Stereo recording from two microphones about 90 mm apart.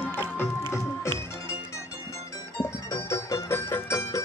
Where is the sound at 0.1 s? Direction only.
25° left (ahead or behind).